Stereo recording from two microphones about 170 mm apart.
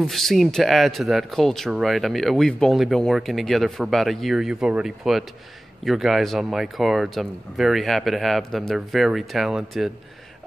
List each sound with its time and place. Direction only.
0.0 s speech: centre (ahead or behind)